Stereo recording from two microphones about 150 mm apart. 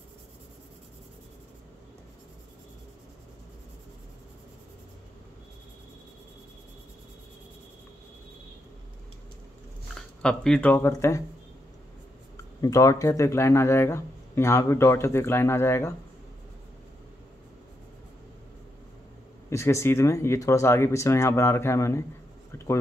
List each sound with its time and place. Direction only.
9.9 s speech: 5° left (ahead or behind); by 11.2 s 20° left (ahead or behind)
12.6 s speech: 20° left (ahead or behind)
19.5 s speech: 20° left (ahead or behind)